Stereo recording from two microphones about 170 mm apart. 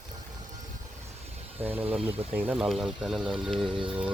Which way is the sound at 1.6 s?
10° right (ahead or behind).